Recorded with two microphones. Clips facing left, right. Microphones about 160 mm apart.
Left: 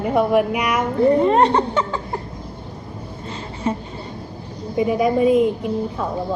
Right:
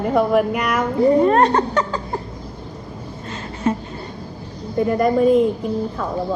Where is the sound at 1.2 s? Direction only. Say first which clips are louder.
Even; 25° left (ahead or behind).